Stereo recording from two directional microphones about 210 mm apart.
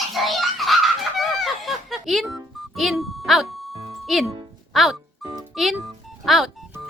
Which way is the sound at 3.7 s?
30° right (ahead or behind).